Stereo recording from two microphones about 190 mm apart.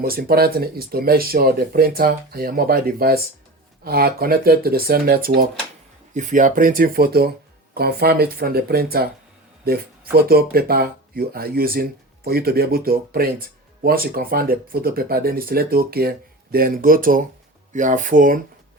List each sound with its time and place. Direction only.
0.0 s speech: 50° right (ahead or behind)